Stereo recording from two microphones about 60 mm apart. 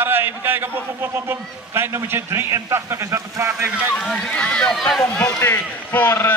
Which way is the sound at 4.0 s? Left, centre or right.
Centre.